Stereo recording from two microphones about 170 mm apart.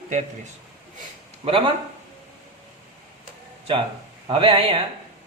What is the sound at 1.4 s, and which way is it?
Speech, 30° right (ahead or behind).